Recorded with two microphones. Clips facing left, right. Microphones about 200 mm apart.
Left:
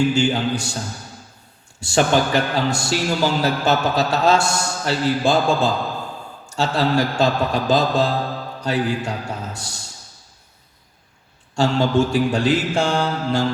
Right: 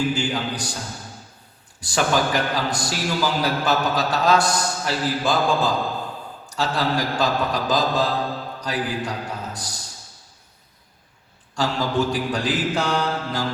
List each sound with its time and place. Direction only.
0.1 s a man's voice: 25° left (ahead or behind)
1.8 s a man's voice: 25° left (ahead or behind)
11.5 s a man's voice: 25° left (ahead or behind)